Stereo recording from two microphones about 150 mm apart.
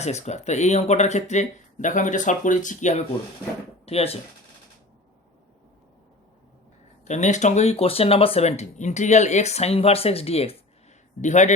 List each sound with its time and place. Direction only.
0.0 s speech: 50° left (ahead or behind)
3.8 s speech: 40° left (ahead or behind)
7.0 s speech: 50° left (ahead or behind)
11.2 s speech: 50° left (ahead or behind)